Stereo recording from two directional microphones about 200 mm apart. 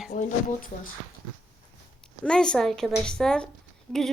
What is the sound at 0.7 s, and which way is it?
Speech, 40° left (ahead or behind).